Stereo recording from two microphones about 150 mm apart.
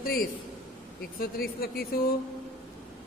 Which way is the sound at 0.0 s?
80° left.